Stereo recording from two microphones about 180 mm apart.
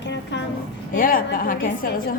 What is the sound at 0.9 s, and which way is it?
A woman's voice, 50° left (ahead or behind).